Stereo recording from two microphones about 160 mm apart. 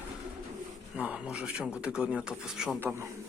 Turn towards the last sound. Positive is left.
turn(degrees=-15)  # may be behind; listen again after turning